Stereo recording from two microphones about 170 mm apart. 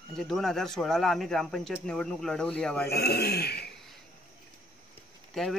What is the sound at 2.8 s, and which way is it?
Speech, 70° left (ahead or behind).